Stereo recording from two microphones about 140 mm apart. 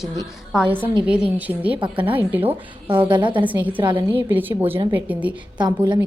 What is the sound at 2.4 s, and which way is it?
A woman's voice, 35° right (ahead or behind).